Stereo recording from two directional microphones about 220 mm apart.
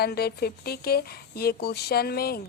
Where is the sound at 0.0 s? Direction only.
45° left (ahead or behind).